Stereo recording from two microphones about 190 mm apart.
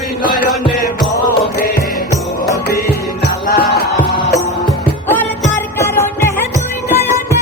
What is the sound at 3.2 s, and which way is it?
Music, 55° left (ahead or behind).